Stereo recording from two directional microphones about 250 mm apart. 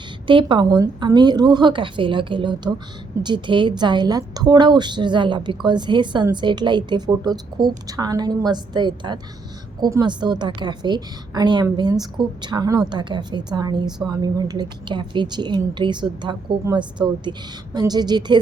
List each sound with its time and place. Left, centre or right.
0.3 s a woman's voice: centre